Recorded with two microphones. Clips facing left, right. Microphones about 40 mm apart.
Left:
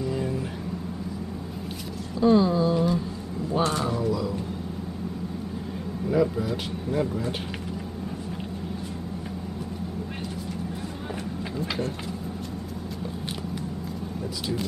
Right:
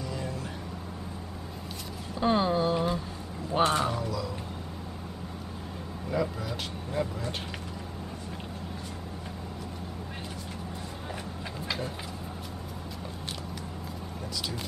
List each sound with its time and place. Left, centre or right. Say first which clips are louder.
0.0 s vehicle: left 7 dB; centre
2.1 s a sound: left 5 dB; right
3.5 s speech: even; right
6.0 s speech: left 7 dB; centre